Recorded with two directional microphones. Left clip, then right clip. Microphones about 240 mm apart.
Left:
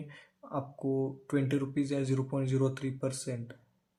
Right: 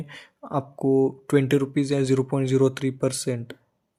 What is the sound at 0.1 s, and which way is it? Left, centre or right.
Speech, right.